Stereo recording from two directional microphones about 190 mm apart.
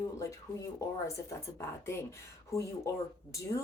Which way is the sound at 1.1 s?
15° left (ahead or behind).